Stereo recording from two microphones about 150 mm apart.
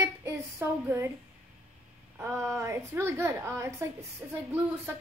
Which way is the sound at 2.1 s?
20° right (ahead or behind).